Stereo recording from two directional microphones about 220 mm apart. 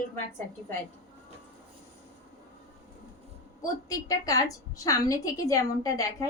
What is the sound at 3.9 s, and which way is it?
A woman's voice, 15° left (ahead or behind).